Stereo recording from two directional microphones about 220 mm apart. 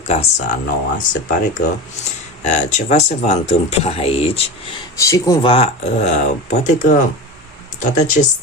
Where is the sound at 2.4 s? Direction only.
30° left (ahead or behind).